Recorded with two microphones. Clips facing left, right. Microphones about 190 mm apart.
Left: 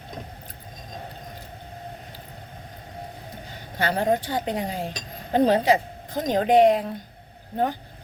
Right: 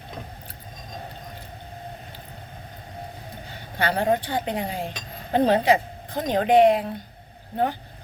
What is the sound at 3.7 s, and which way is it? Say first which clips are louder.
Speech: even; 40° left (ahead or behind).